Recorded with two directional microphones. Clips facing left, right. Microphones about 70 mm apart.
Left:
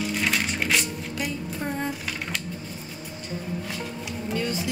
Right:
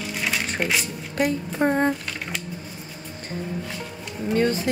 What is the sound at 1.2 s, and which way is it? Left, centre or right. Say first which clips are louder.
Speech: right 10 dB; right.